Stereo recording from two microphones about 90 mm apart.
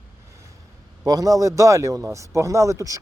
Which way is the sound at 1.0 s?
45° right (ahead or behind).